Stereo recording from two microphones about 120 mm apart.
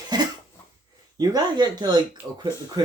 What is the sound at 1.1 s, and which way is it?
Speech, 35° right (ahead or behind).